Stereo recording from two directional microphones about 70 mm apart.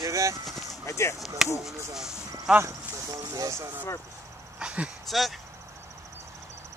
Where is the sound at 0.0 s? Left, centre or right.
Right.